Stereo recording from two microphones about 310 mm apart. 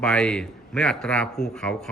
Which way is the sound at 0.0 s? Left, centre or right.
Centre.